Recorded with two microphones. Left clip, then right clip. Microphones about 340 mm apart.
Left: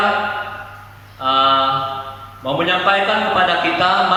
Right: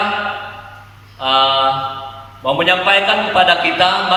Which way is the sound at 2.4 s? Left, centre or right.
Right.